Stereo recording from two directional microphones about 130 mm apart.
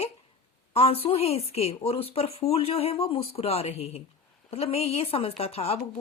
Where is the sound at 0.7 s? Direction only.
50° left (ahead or behind).